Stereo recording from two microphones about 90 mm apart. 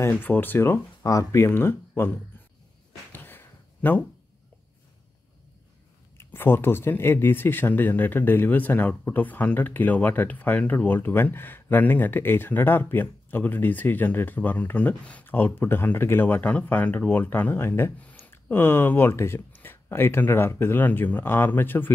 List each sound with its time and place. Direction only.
0.0 s speech: 25° left (ahead or behind)
3.1 s a sound: 20° left (ahead or behind)
6.1 s speech: 25° left (ahead or behind)